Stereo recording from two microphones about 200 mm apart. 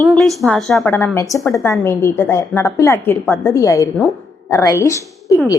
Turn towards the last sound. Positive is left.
turn(degrees=15)  # may be behind; listen again after turning